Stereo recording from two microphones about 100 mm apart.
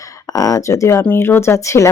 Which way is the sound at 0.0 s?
35° left (ahead or behind).